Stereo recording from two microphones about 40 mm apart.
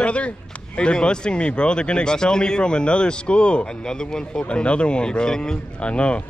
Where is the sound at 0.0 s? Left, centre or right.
Left.